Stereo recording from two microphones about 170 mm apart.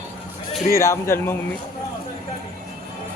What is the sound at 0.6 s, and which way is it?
Speech, 15° left (ahead or behind).